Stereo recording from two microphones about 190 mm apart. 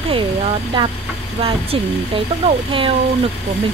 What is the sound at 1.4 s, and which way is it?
Speech, 30° right (ahead or behind).